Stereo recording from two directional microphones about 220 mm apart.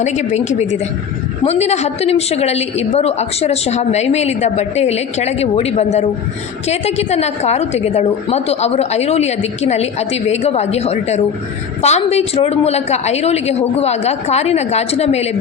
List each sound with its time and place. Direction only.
0.0 s a woman's voice: 30° left (ahead or behind)